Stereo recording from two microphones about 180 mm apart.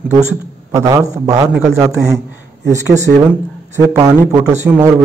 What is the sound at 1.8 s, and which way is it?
A man's voice, 15° right (ahead or behind).